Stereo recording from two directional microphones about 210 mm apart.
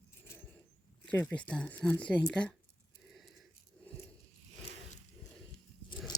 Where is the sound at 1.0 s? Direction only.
5° left (ahead or behind).